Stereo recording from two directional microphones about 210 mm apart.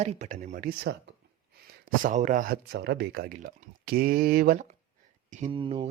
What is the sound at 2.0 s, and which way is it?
Speech, 35° right (ahead or behind).